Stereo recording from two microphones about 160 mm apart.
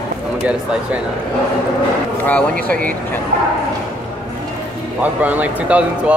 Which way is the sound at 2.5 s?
65° right (ahead or behind).